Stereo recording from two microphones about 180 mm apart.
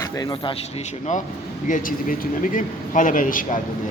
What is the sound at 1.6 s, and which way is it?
Speech, 45° left (ahead or behind).